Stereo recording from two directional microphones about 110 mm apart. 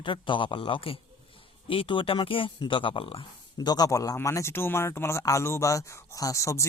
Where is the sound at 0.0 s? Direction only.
50° left (ahead or behind).